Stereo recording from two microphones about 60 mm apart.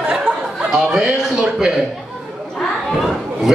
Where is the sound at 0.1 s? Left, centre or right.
Centre.